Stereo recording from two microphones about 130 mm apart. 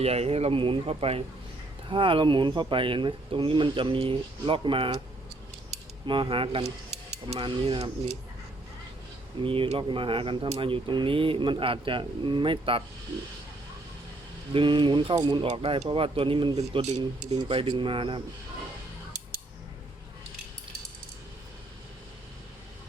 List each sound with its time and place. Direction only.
0.0 s speech: 50° right (ahead or behind)
6.1 s speech: 40° right (ahead or behind); by 7.4 s 55° right (ahead or behind)
7.4 s speech: 40° right (ahead or behind)
9.4 s speech: 45° right (ahead or behind)
14.5 s speech: 40° right (ahead or behind)
16.6 s speech: 60° right (ahead or behind)
17.3 s speech: 40° right (ahead or behind)